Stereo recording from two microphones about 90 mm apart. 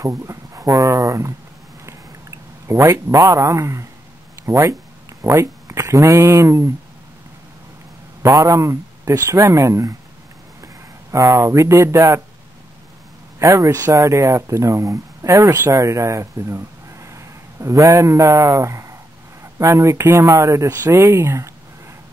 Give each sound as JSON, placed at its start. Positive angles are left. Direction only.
{"t": 0.0, "sound": "speech", "side_deg": -35}
{"t": 2.7, "sound": "speech", "side_deg": -30}
{"t": 8.2, "sound": "speech", "side_deg": -40}
{"t": 13.4, "sound": "speech", "side_deg": -35}